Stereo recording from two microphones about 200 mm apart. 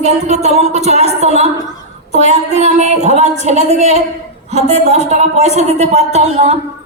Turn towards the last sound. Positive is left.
turn(degrees=-30)  # may be behind; listen again after turning